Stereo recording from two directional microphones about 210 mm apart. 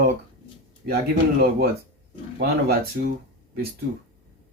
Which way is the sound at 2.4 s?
50° right (ahead or behind).